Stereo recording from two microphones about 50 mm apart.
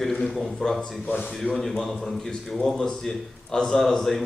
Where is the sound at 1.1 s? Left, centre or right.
Left.